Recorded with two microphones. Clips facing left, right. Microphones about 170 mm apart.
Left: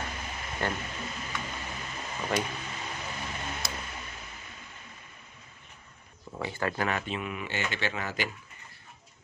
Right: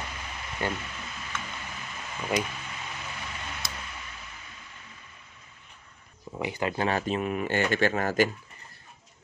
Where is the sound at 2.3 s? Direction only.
10° right (ahead or behind).